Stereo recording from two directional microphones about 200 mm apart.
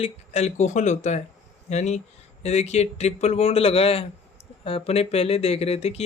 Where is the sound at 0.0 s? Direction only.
35° left (ahead or behind).